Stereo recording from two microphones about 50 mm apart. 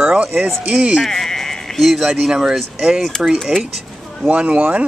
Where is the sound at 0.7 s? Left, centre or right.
Right.